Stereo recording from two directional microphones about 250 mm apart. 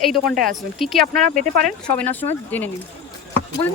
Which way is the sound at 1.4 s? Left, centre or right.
Right.